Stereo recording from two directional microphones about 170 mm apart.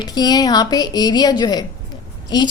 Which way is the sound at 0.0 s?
25° left (ahead or behind).